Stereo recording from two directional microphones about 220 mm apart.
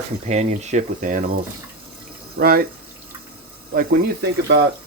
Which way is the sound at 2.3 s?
40° right (ahead or behind).